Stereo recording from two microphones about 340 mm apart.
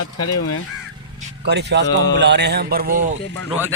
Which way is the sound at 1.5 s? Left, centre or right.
Right.